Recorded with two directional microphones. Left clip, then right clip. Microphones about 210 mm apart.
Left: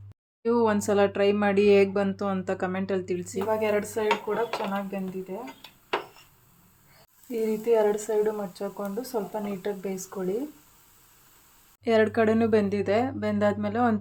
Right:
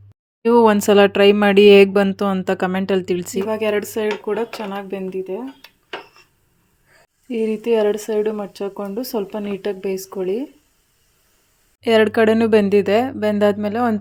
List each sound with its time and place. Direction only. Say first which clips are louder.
0.4 s speech: right 11 dB; 40° right (ahead or behind)
7.3 s speech: right 6 dB; 35° right (ahead or behind)
11.8 s speech: right 8 dB; 40° right (ahead or behind)